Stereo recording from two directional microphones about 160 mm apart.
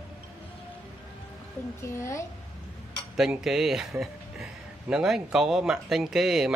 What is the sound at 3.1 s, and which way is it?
Speech, centre (ahead or behind).